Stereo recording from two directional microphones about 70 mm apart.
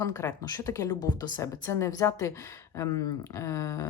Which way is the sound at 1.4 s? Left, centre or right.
Left.